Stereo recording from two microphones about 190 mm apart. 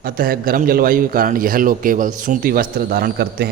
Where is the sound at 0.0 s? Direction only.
50° right (ahead or behind).